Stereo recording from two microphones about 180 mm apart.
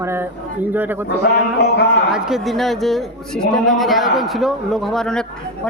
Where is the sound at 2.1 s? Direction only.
5° right (ahead or behind).